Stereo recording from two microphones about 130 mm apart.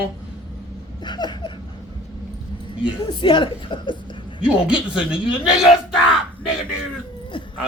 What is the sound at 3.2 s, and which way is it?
Speech, 40° left (ahead or behind).